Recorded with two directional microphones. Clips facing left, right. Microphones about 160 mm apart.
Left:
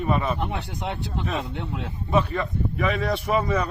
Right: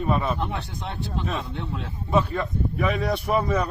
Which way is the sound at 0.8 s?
75° left (ahead or behind).